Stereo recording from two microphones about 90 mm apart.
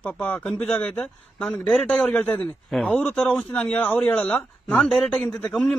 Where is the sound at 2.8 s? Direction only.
20° left (ahead or behind).